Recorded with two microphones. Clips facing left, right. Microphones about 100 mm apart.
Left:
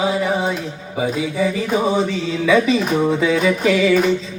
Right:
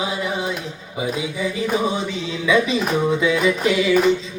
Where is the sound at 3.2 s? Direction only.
35° left (ahead or behind).